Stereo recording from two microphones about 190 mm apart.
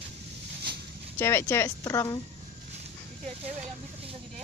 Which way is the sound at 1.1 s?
15° left (ahead or behind).